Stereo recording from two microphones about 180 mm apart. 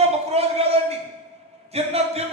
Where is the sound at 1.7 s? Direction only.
35° right (ahead or behind).